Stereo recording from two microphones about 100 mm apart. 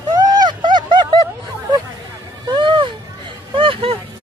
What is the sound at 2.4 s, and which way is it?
Vehicle, 50° right (ahead or behind).